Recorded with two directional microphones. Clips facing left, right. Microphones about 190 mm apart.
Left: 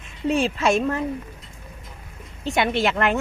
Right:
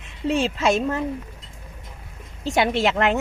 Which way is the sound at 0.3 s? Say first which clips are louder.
Even; 25° right (ahead or behind).